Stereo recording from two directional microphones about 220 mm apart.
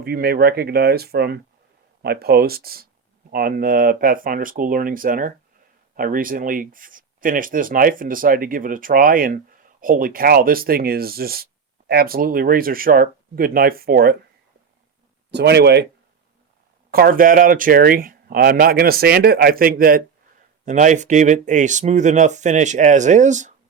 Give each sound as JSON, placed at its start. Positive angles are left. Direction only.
{"t": 0.0, "sound": "speech", "side_deg": -45}
{"t": 15.3, "sound": "speech", "side_deg": -50}
{"t": 16.9, "sound": "speech", "side_deg": -40}